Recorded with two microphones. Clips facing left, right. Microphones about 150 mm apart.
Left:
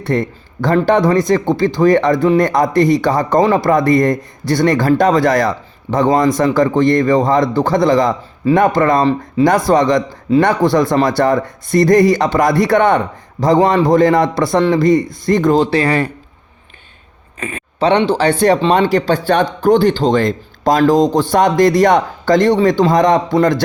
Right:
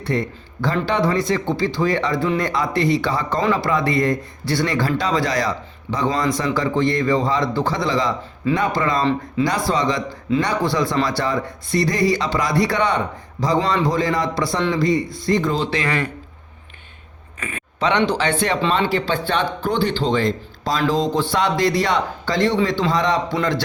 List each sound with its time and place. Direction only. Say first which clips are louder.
0.0 s speech: left 5 dB; 50° left (ahead or behind); by 16.1 s 35° left (ahead or behind)
17.4 s speech: left 6 dB; 35° left (ahead or behind)